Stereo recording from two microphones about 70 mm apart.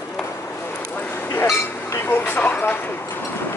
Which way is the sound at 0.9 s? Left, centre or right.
Left.